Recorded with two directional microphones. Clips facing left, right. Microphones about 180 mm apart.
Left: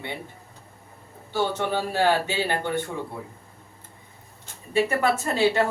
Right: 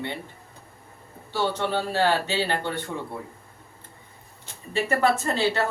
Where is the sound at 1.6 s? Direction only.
10° left (ahead or behind).